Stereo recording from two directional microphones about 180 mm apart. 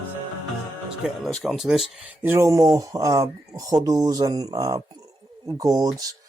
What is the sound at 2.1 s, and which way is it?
Speech, 10° right (ahead or behind).